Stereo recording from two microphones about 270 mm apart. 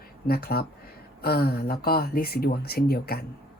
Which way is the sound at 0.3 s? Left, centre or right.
Left.